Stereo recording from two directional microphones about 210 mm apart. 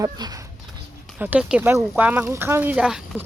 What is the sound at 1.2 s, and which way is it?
Speech, 5° right (ahead or behind).